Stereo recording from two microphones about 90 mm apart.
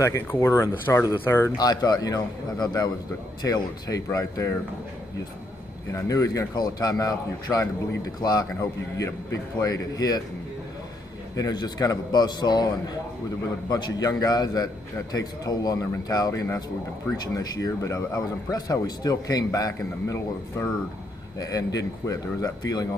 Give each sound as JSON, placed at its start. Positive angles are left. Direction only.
{"t": 0.0, "sound": "speech", "side_deg": 30}
{"t": 1.6, "sound": "a man's voice", "side_deg": 45}
{"t": 5.9, "sound": "a man's voice", "side_deg": 40}
{"t": 11.3, "sound": "a man's voice", "side_deg": 45}
{"t": 13.7, "sound": "a man's voice", "side_deg": 50}
{"t": 21.4, "sound": "a man's voice", "side_deg": 40}